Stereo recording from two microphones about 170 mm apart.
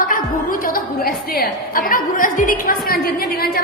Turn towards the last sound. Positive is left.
turn(degrees=65)  # may be behind; listen again after turning